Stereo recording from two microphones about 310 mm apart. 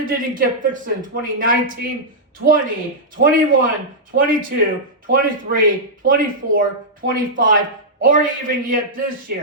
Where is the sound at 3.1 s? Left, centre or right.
Right.